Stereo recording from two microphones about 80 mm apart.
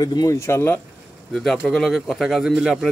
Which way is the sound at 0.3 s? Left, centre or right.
Left.